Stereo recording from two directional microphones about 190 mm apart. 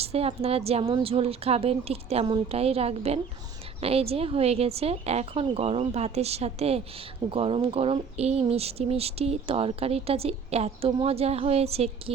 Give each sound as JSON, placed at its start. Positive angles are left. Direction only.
{"t": 0.0, "sound": "speech", "side_deg": -30}